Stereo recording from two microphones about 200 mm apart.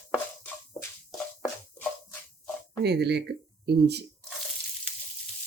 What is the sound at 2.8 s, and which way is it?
Speech, 55° right (ahead or behind).